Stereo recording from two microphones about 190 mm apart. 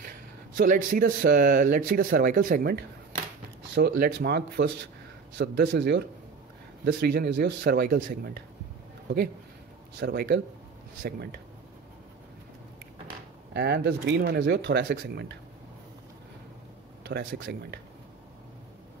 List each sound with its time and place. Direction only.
0.6 s speech: 45° right (ahead or behind); by 6.0 s 65° right (ahead or behind)
6.9 s speech: 55° right (ahead or behind)
9.9 s speech: 55° right (ahead or behind)
13.5 s speech: 60° right (ahead or behind)
17.0 s speech: 55° right (ahead or behind)